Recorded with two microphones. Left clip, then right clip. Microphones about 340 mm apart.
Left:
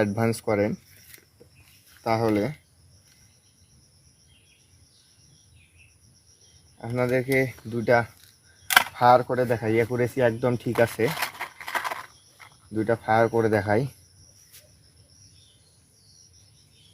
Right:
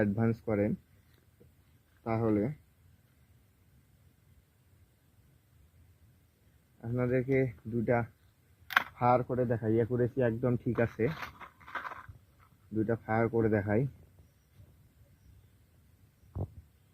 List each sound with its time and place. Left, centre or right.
0.0 s speech: centre
2.0 s speech: centre
6.8 s speech: centre